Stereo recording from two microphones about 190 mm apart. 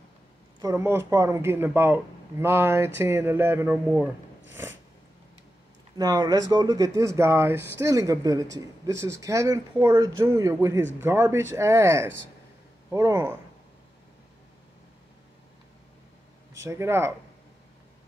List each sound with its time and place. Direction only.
0.6 s speech: 15° right (ahead or behind)
5.9 s speech: 20° right (ahead or behind)
16.6 s speech: 15° right (ahead or behind)